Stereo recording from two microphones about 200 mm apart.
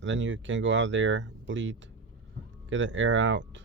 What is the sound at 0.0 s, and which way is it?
Speech, 65° right (ahead or behind).